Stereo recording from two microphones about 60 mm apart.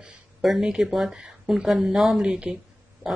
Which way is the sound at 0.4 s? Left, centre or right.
Centre.